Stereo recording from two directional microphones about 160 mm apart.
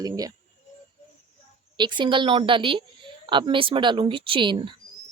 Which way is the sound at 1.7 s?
30° right (ahead or behind).